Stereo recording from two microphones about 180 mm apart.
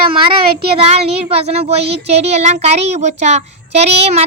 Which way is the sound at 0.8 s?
35° right (ahead or behind).